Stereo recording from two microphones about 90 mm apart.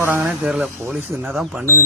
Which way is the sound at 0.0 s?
20° right (ahead or behind).